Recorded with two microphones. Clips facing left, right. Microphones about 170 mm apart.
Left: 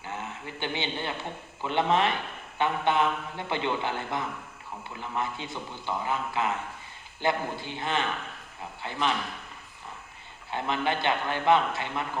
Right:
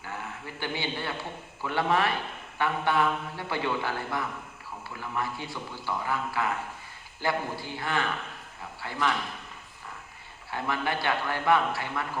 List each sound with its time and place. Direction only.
0.0 s a sound: 20° left (ahead or behind)
1.6 s speech: 20° left (ahead or behind)
10.5 s speech: 20° left (ahead or behind)